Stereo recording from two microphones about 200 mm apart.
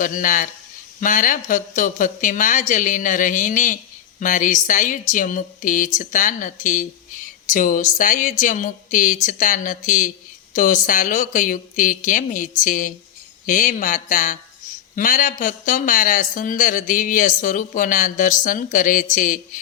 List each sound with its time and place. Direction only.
0.0 s speech: 40° left (ahead or behind)